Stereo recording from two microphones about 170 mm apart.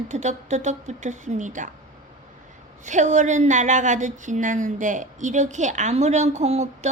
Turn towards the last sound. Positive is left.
turn(degrees=-40)  # may be behind; listen again after turning